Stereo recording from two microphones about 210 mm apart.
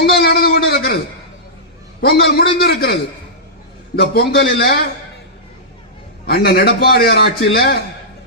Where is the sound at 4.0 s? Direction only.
50° left (ahead or behind).